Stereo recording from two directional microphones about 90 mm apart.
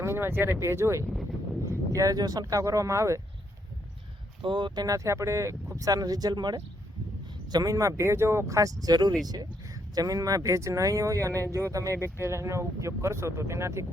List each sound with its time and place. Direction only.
0.0 s speech: 30° right (ahead or behind)
4.4 s speech: 60° right (ahead or behind); by 13.8 s 30° right (ahead or behind)